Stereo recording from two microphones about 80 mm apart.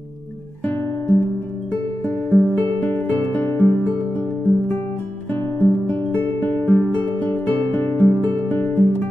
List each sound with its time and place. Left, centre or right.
0.7 s music: left
5.3 s music: left